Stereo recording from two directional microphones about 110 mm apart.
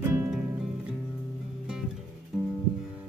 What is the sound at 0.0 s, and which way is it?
Music, 20° right (ahead or behind).